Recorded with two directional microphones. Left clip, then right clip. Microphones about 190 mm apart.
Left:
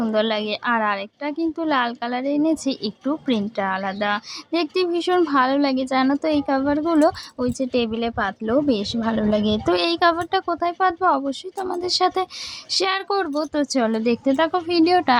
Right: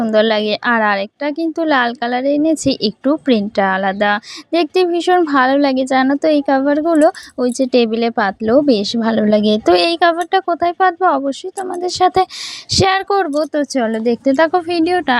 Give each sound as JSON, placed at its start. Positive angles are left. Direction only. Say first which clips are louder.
{"t": 0.0, "sound": "a woman's voice", "louder": "right 8 dB", "side_deg": -30}